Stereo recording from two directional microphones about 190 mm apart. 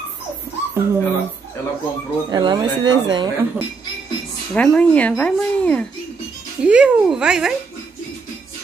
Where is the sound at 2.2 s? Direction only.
20° right (ahead or behind).